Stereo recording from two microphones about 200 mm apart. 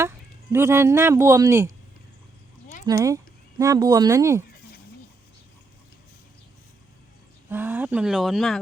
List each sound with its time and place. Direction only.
0.0 s speech: 10° right (ahead or behind)
2.8 s speech: 15° right (ahead or behind)
7.5 s speech: 10° right (ahead or behind)